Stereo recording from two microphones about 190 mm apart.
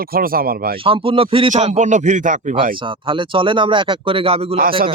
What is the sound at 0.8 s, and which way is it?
A man's voice, 30° right (ahead or behind).